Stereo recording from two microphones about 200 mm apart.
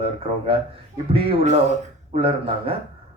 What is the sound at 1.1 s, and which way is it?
Speech, 30° right (ahead or behind).